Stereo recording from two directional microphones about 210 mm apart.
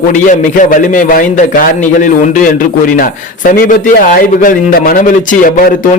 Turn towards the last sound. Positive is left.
turn(degrees=40)  # may be behind; listen again after turning